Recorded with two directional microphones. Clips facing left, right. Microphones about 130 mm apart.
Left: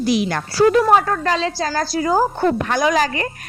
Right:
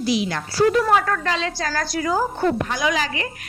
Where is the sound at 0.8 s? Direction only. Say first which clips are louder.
Left 4 dB; 30° left (ahead or behind).